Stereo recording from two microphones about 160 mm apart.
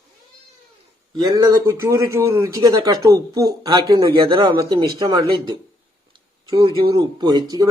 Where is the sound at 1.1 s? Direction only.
25° right (ahead or behind).